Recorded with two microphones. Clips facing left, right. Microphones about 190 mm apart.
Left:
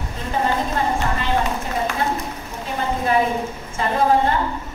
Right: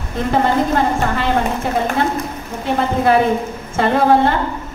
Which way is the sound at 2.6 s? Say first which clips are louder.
Right 7 dB; 80° right.